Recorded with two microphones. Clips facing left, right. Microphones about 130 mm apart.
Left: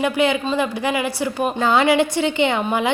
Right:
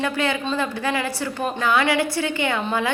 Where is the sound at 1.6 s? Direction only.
25° left (ahead or behind).